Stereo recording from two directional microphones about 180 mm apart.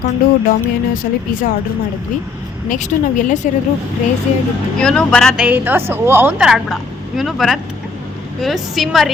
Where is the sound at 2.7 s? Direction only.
45° left (ahead or behind).